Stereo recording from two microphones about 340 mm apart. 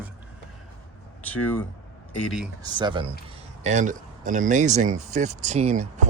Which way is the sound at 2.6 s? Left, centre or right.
Centre.